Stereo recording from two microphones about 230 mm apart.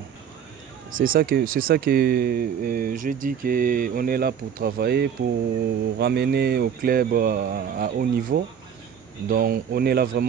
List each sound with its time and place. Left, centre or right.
0.9 s speech: right